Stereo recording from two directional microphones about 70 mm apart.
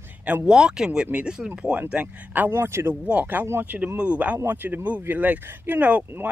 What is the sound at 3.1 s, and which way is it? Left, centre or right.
Speech, right.